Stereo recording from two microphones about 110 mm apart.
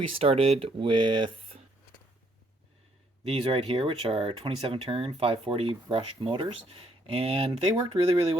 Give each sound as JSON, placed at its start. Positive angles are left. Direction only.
{"t": 0.1, "sound": "speech", "side_deg": -60}
{"t": 3.2, "sound": "speech", "side_deg": -60}